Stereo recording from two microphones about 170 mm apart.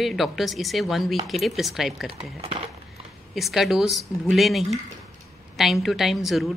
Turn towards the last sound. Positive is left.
turn(degrees=0)  # may be behind; listen again after turning